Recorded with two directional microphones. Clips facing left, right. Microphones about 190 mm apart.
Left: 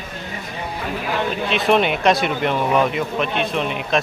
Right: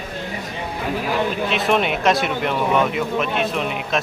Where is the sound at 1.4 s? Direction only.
Centre (ahead or behind).